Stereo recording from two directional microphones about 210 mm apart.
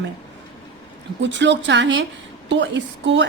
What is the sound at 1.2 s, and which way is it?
A woman's voice, 60° right (ahead or behind).